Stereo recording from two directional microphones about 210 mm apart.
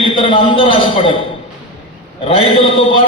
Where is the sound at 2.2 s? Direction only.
25° left (ahead or behind).